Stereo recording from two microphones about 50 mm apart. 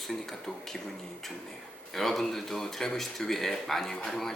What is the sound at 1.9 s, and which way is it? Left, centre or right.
Speech, centre.